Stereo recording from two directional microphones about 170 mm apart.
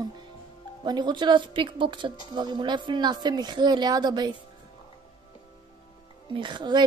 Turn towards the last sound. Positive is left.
turn(degrees=-25)  # may be behind; listen again after turning